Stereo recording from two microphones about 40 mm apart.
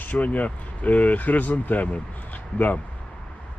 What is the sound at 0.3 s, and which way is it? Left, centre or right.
A man's voice, left.